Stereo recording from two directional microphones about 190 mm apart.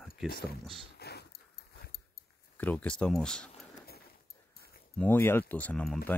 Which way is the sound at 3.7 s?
55° left (ahead or behind).